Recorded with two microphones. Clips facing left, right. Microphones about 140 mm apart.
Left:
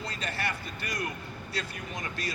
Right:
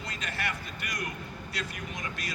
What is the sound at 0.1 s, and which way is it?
A man's voice, 30° left (ahead or behind).